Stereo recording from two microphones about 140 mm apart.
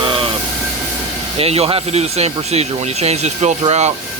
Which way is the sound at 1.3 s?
45° right (ahead or behind).